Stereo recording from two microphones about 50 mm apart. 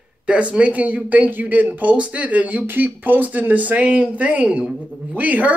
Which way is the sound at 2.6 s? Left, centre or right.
Right.